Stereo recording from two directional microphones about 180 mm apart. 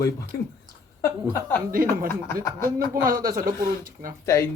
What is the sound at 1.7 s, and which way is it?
Speech, 50° right (ahead or behind).